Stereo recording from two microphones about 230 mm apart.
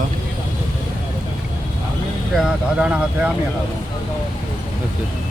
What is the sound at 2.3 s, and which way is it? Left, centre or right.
Speech, centre.